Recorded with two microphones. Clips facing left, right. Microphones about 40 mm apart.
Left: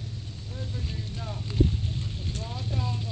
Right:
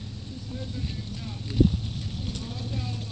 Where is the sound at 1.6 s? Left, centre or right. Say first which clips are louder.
Right 4 dB; centre.